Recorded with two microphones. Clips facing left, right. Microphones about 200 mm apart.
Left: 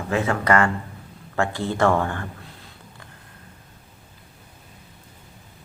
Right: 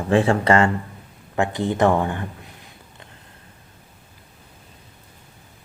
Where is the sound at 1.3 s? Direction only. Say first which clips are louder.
Right 2 dB; 20° right (ahead or behind).